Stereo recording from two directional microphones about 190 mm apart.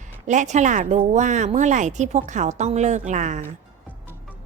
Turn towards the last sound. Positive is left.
turn(degrees=-40)  # may be behind; listen again after turning